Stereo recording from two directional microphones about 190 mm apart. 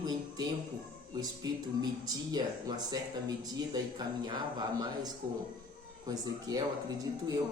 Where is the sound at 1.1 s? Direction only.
20° right (ahead or behind).